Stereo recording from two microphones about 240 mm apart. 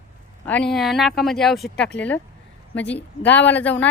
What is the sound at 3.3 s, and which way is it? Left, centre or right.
Speech, centre.